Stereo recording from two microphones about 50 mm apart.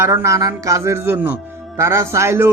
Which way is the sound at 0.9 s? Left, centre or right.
Right.